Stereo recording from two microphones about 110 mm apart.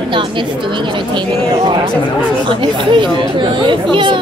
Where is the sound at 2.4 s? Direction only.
45° right (ahead or behind).